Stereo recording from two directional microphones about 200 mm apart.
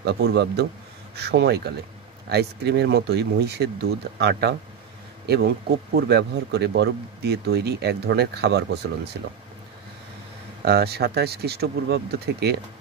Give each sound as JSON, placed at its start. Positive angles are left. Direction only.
{"t": 0.0, "sound": "speech", "side_deg": -55}
{"t": 10.6, "sound": "speech", "side_deg": -55}